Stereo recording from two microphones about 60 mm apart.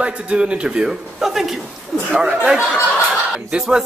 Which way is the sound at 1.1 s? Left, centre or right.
Centre.